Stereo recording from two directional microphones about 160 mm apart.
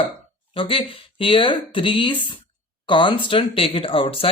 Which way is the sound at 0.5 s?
30° left (ahead or behind).